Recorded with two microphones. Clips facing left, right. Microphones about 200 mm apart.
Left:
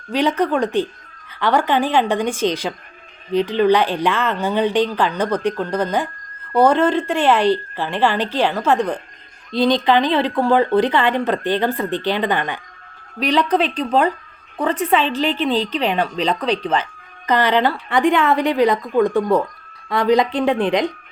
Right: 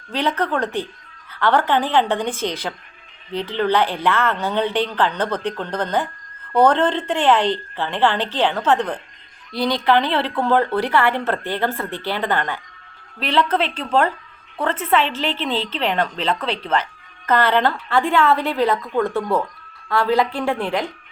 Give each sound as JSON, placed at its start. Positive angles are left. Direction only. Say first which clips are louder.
{"t": 0.1, "sound": "a woman's voice", "louder": "left 4 dB", "side_deg": 15}